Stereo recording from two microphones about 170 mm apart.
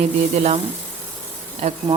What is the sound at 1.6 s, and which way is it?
Speech, 40° right (ahead or behind).